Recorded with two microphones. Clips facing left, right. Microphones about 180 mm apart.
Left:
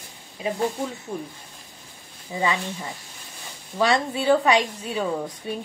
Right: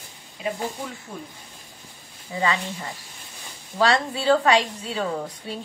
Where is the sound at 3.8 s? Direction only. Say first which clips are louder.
Even; 20° left (ahead or behind).